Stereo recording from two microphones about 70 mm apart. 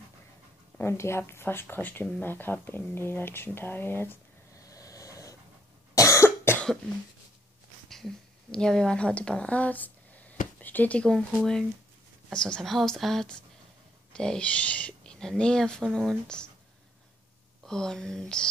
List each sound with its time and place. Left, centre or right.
0.7 s speech: left
4.6 s vehicle: left
5.9 s cough: left
7.9 s a sound: centre
11.1 s a woman's voice: centre
17.6 s speech: centre